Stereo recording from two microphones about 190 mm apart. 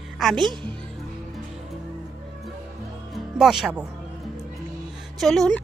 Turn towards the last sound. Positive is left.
turn(degrees=0)  # may be behind; listen again after turning